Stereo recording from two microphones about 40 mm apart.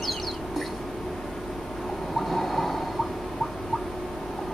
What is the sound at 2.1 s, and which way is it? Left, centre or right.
Train, centre.